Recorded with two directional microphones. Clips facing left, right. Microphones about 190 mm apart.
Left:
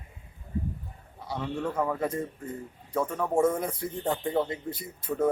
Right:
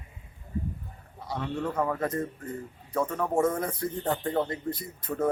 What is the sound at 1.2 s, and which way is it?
Speech, 5° left (ahead or behind).